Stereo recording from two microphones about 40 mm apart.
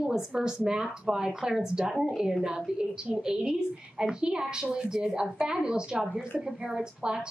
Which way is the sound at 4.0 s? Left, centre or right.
Right.